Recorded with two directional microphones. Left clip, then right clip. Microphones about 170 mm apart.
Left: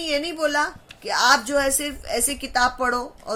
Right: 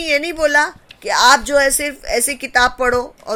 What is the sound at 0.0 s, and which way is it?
A woman's voice, 40° right (ahead or behind).